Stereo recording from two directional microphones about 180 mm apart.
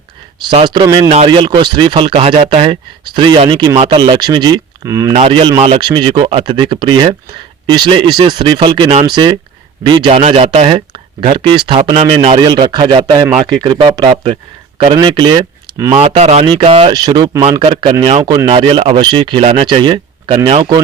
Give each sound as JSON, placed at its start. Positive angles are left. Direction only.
{"t": 0.6, "sound": "speech", "side_deg": -25}
{"t": 5.1, "sound": "speech", "side_deg": -30}
{"t": 16.0, "sound": "speech", "side_deg": -35}
{"t": 17.6, "sound": "speech", "side_deg": -35}